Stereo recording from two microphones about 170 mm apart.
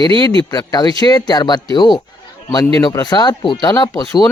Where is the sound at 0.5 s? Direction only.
25° left (ahead or behind).